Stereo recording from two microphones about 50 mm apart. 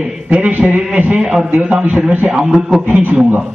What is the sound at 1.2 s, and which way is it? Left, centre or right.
Speech, centre.